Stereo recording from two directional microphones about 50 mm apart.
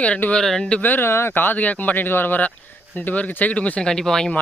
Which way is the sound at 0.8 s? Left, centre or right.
Left.